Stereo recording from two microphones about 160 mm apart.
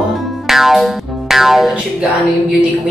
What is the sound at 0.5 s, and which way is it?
Music, centre (ahead or behind).